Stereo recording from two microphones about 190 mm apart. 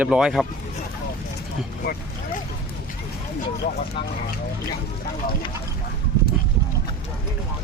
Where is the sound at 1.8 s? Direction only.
55° left (ahead or behind).